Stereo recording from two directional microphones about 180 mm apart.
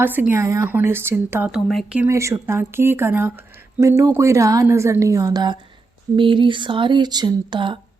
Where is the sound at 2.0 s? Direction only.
15° right (ahead or behind).